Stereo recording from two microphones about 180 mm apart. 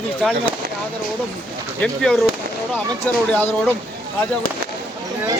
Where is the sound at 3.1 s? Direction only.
10° left (ahead or behind).